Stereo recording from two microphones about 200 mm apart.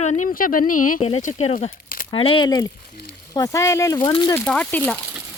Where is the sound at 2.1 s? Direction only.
25° left (ahead or behind).